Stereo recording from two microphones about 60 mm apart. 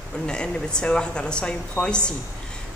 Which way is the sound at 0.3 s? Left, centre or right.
Centre.